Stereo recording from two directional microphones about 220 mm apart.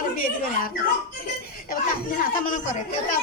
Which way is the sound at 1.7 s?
40° left (ahead or behind).